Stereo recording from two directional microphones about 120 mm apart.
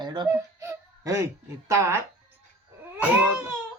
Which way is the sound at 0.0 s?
40° right (ahead or behind).